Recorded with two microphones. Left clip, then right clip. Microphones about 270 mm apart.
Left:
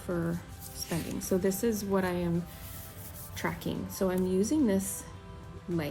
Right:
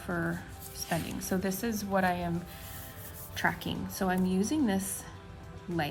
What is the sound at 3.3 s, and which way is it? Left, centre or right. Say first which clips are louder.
Speech: right 4 dB; right.